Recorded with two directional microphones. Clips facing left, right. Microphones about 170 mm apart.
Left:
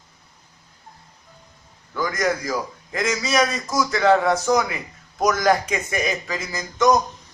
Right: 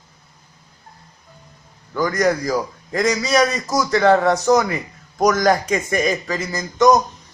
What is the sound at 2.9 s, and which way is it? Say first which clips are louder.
A man's voice: right 4 dB; 40° right (ahead or behind).